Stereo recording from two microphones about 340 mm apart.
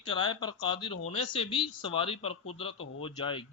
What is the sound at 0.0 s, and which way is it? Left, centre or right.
Speech, centre.